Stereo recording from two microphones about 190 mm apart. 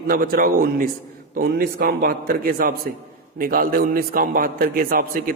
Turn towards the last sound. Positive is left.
turn(degrees=-50)  # may be behind; listen again after turning